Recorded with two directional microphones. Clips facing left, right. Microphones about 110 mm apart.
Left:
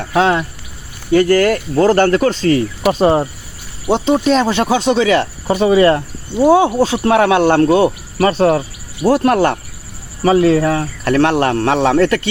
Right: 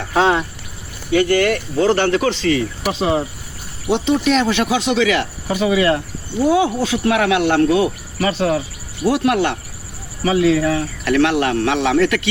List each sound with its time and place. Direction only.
1.1 s speech: 40° left (ahead or behind)
3.9 s speech: 35° left (ahead or behind)